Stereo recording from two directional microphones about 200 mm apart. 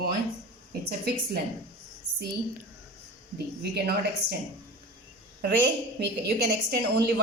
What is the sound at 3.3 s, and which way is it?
A woman's voice, 55° right (ahead or behind).